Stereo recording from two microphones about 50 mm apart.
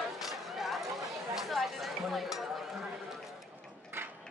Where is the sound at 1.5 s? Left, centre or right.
Centre.